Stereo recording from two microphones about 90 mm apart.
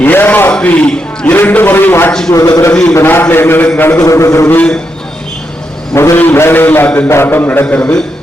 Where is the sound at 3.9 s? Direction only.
35° left (ahead or behind).